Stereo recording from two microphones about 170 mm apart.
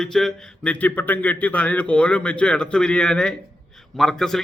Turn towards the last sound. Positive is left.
turn(degrees=5)  # may be behind; listen again after turning